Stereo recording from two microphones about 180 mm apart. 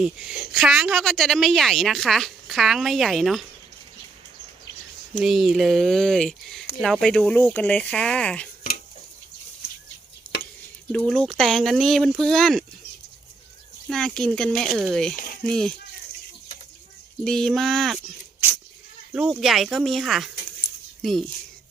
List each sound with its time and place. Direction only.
0.0 s a woman's voice: 5° right (ahead or behind)
5.2 s a woman's voice: centre (ahead or behind)
10.9 s a woman's voice: 5° left (ahead or behind)
13.8 s a woman's voice: 5° left (ahead or behind)
15.1 s speech: 55° left (ahead or behind)
15.4 s a woman's voice: 5° left (ahead or behind)
17.2 s a woman's voice: 5° left (ahead or behind)
19.1 s a woman's voice: 5° right (ahead or behind)